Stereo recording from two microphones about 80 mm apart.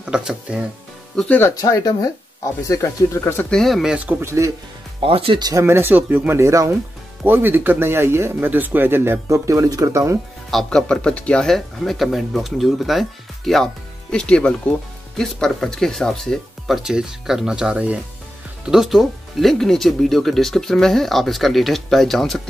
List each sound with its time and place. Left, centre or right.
0.0 s speech: centre
1.6 s speech: left
2.6 s speech: left
3.4 s speech: centre
3.9 s speech: centre
4.2 s speech: right
5.5 s speech: right
7.2 s speech: right
10.5 s speech: centre